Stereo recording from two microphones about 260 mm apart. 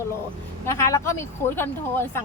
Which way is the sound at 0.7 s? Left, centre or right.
Centre.